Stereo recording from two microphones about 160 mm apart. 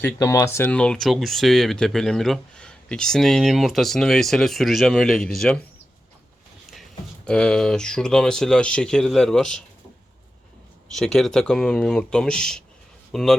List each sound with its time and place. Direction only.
0.0 s speech: 20° left (ahead or behind)
7.3 s speech: 5° left (ahead or behind)
10.9 s speech: 5° left (ahead or behind)